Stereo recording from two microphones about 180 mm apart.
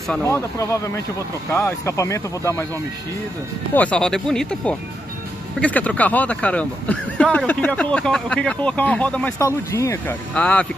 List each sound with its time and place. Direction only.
0.1 s speech: 15° left (ahead or behind)
3.7 s speech: 5° left (ahead or behind)